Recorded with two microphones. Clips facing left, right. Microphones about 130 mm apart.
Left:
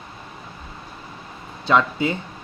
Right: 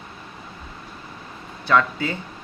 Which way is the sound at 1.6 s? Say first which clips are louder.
Left 1 dB; 20° left (ahead or behind).